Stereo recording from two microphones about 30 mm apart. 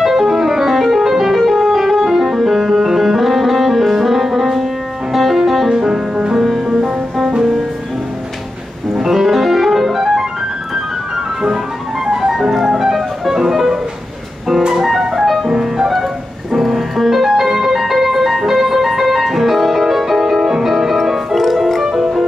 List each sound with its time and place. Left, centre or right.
0.0 s music: centre
5.7 s music: centre
6.3 s music: centre
8.9 s music: centre
12.1 s music: centre
15.0 s music: centre
17.4 s music: centre